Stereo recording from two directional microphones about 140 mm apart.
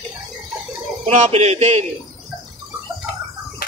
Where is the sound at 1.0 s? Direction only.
50° right (ahead or behind).